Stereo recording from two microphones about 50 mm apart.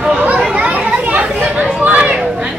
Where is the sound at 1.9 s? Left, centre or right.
Right.